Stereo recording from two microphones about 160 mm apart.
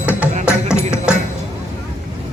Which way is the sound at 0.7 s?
15° left (ahead or behind).